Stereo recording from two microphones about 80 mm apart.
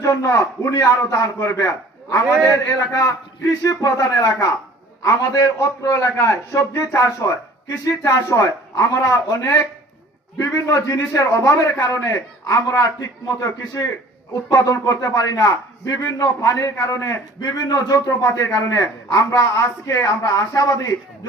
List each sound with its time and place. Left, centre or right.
0.0 s a man's voice: left
16.7 s a man's voice: left
18.3 s a man's voice: left
18.7 s a man's voice: left